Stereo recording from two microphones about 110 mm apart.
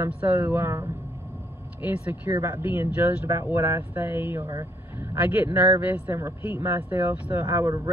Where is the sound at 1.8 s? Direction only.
15° right (ahead or behind).